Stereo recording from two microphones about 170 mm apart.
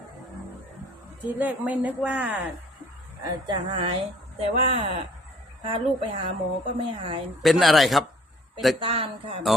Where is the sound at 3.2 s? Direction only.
30° right (ahead or behind).